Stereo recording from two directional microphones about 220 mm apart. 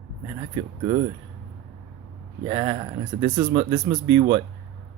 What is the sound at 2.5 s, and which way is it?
Speech, 25° right (ahead or behind).